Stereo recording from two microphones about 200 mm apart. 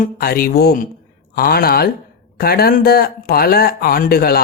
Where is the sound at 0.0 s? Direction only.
45° left (ahead or behind).